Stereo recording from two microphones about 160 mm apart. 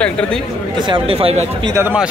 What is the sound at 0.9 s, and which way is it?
Speech, 35° right (ahead or behind).